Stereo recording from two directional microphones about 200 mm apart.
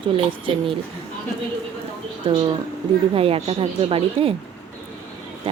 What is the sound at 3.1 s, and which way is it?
Speech, 30° right (ahead or behind).